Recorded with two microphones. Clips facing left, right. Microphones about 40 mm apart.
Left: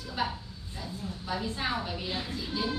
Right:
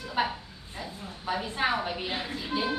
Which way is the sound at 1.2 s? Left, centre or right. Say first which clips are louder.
Right 5 dB; right.